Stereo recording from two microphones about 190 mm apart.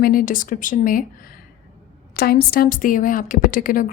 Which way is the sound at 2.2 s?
55° left (ahead or behind).